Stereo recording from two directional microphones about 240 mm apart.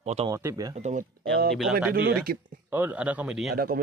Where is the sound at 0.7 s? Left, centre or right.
Right.